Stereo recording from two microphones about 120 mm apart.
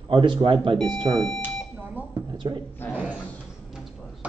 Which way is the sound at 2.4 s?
40° right (ahead or behind).